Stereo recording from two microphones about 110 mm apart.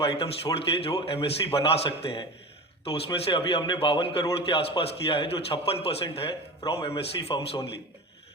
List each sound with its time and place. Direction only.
0.0 s a man's voice: 60° left (ahead or behind)